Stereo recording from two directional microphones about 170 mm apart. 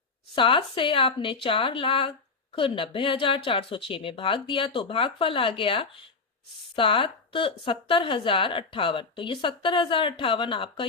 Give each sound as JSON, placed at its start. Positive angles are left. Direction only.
{"t": 0.3, "sound": "a woman's voice", "side_deg": 30}